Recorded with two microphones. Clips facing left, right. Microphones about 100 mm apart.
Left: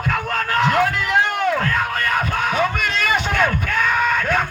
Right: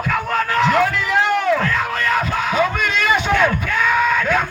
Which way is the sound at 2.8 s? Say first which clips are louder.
Right 2 dB; 50° left (ahead or behind).